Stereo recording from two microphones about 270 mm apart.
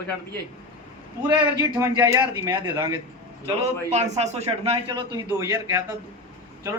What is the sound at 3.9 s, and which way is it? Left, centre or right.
A man's voice, right.